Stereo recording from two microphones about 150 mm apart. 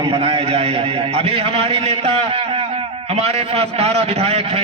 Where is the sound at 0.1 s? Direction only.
40° right (ahead or behind).